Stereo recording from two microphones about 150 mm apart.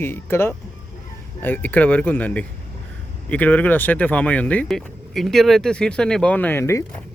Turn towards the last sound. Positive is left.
turn(degrees=15)  # may be behind; listen again after turning